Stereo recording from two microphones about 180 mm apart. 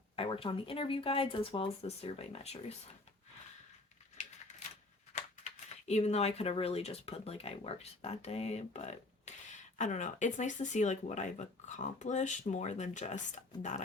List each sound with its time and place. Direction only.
0.2 s speech: 30° left (ahead or behind)
4.4 s a sound: 40° left (ahead or behind)
5.9 s speech: 35° left (ahead or behind)